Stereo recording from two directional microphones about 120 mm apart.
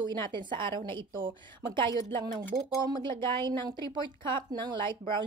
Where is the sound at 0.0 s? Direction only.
40° right (ahead or behind).